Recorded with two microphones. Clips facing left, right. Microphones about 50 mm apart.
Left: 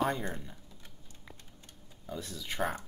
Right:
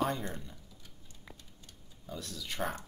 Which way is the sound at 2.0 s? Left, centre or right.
Centre.